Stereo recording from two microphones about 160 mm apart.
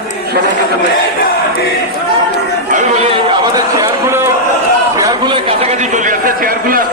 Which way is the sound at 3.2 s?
30° right (ahead or behind).